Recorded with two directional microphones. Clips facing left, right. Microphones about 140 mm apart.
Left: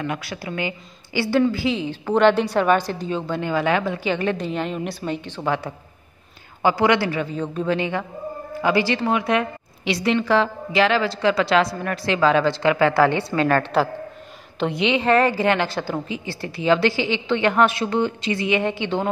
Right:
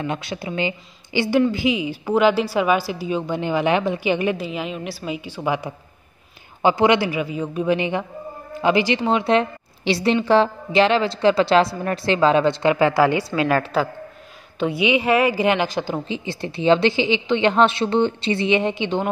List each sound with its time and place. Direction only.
0.0 s a woman's voice: 25° right (ahead or behind)
4.4 s a woman's voice: 5° right (ahead or behind)